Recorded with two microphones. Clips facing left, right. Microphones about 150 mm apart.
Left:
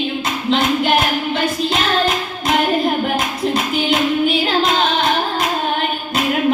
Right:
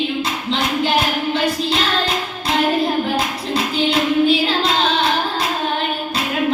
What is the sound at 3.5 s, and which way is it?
Music, 20° left (ahead or behind).